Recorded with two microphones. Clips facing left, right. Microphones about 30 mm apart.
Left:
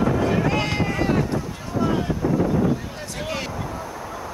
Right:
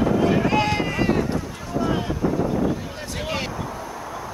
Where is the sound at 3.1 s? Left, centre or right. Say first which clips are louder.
Right 1 dB; centre.